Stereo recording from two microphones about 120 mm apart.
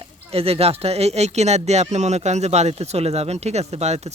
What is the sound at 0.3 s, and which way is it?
Speech, 55° right (ahead or behind).